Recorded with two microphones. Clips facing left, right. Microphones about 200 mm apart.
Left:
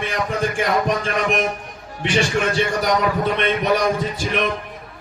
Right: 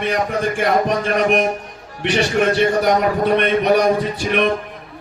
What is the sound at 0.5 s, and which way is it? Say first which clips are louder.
A man's voice: right 4 dB; 55° right (ahead or behind).